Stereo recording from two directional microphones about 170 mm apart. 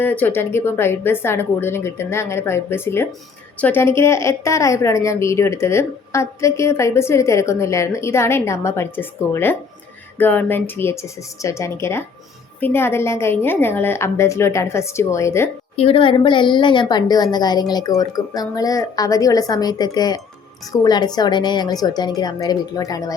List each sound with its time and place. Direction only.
0.0 s a woman's voice: 10° left (ahead or behind)
15.7 s a woman's voice: 35° left (ahead or behind)